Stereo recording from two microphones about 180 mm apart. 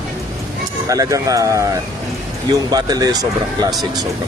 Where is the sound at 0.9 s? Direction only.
20° right (ahead or behind).